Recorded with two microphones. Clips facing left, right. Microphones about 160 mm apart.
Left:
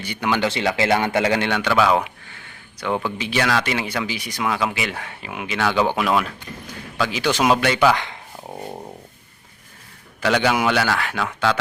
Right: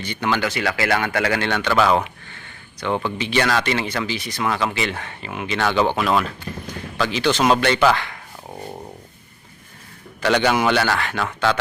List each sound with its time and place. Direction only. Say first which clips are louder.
0.0 s speech: even; 10° left (ahead or behind)
0.4 s speech: left 2 dB; 25° left (ahead or behind); by 7.9 s 5° left (ahead or behind)
7.9 s a sound: even; 20° left (ahead or behind)
10.2 s a man's voice: right 1 dB; 5° left (ahead or behind)